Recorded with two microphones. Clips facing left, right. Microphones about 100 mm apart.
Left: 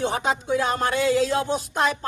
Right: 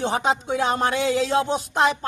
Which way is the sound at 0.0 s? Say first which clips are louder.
Right 2 dB; 25° right (ahead or behind).